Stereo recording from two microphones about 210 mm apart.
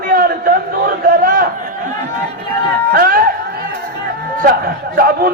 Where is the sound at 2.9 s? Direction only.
45° right (ahead or behind).